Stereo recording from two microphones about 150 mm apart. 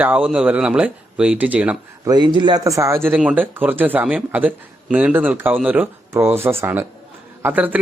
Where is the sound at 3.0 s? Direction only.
10° right (ahead or behind).